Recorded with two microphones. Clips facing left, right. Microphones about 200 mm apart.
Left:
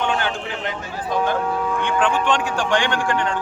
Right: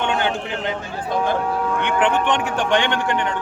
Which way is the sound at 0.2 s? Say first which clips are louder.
Right 3 dB; 25° right (ahead or behind).